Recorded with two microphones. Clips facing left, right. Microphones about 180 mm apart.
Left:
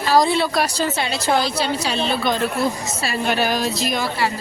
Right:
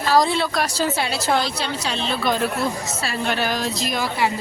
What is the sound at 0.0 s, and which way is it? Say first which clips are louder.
Speech: left 2 dB; centre (ahead or behind).